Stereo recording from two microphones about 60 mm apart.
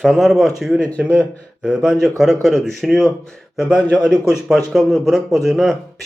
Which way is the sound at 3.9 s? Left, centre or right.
Centre.